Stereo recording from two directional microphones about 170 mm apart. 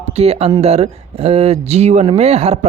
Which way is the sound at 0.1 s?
40° right (ahead or behind).